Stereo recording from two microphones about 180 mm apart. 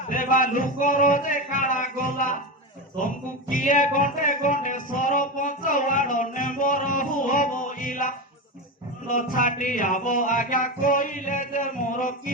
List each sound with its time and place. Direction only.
0.0 s speech: 50° left (ahead or behind)
3.5 s music: 45° left (ahead or behind)